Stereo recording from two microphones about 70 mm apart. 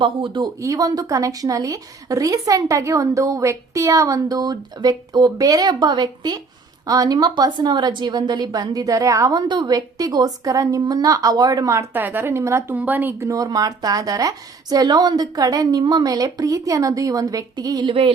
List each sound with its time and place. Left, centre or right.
0.6 s a woman's voice: right
6.8 s a woman's voice: right
11.9 s a woman's voice: right
12.7 s speech: right
13.1 s a woman's voice: right